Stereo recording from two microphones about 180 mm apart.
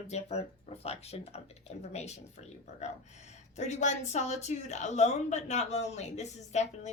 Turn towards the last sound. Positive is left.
turn(degrees=40)  # may be behind; listen again after turning